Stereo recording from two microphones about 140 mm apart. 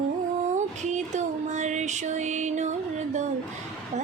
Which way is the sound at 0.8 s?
55° right (ahead or behind).